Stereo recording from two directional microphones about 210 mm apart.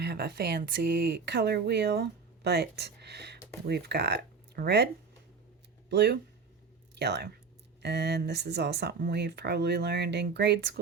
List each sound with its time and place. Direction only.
0.0 s speech: 50° right (ahead or behind)
5.9 s speech: 55° right (ahead or behind)